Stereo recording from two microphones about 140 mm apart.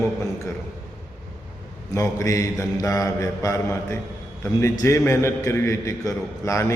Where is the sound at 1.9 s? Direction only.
25° left (ahead or behind).